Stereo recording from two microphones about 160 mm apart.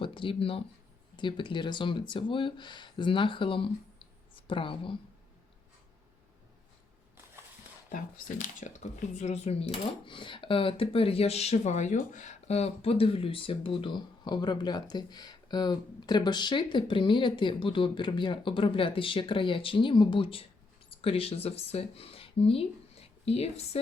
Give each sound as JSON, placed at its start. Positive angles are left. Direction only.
{"t": 0.0, "sound": "speech", "side_deg": 30}
{"t": 7.9, "sound": "speech", "side_deg": 55}